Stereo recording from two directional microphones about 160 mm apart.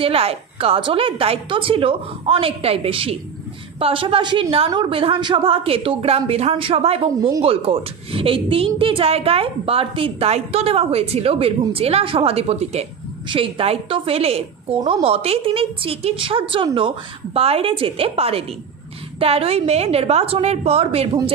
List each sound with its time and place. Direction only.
0.0 s a woman's voice: 40° right (ahead or behind)